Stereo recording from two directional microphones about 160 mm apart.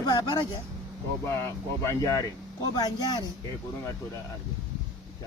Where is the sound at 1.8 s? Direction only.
20° left (ahead or behind).